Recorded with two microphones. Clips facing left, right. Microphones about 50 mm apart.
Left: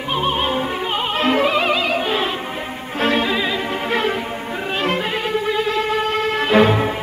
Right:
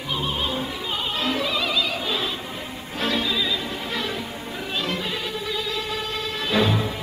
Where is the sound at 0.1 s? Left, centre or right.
Left.